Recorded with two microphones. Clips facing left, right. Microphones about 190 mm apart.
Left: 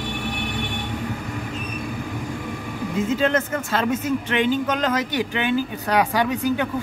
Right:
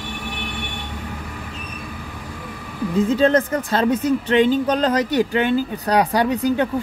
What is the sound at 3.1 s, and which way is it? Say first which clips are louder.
A woman's voice: right 5 dB; 35° right (ahead or behind).